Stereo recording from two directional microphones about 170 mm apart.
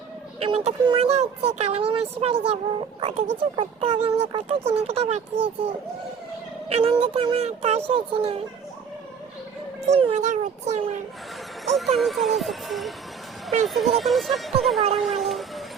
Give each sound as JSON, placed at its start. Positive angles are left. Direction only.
{"t": 0.3, "sound": "speech", "side_deg": -35}
{"t": 6.7, "sound": "speech", "side_deg": -35}
{"t": 9.8, "sound": "a child's voice", "side_deg": -35}
{"t": 11.6, "sound": "speech", "side_deg": 0}
{"t": 14.9, "sound": "a sound", "side_deg": 0}